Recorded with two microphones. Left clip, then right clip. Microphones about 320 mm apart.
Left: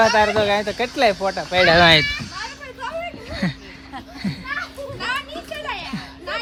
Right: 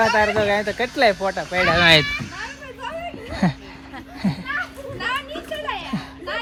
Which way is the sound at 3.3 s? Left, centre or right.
Centre.